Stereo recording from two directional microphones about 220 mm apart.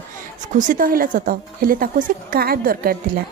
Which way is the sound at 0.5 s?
40° right (ahead or behind).